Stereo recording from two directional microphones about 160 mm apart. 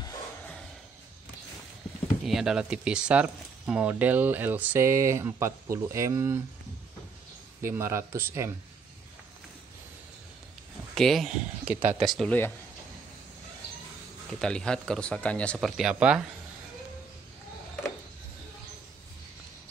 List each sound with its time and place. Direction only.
2.2 s speech: 5° right (ahead or behind)
7.6 s speech: 15° right (ahead or behind)
11.0 s speech: centre (ahead or behind)
12.0 s speech: centre (ahead or behind)
14.4 s speech: 5° left (ahead or behind)